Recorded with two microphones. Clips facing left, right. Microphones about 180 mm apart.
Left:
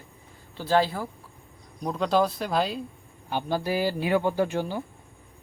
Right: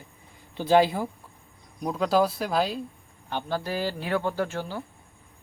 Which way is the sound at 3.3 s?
10° left (ahead or behind).